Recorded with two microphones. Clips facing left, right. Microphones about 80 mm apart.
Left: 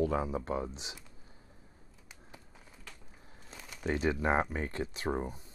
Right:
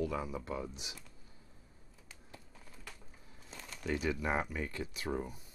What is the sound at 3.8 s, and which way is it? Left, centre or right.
Speech, left.